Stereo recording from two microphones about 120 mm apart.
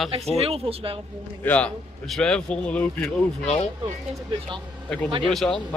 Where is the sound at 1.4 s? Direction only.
15° left (ahead or behind).